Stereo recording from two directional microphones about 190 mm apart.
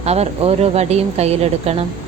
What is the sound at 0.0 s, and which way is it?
A woman's voice, 35° right (ahead or behind).